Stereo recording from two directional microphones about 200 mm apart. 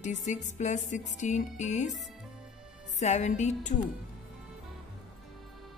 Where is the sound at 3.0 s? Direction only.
35° left (ahead or behind).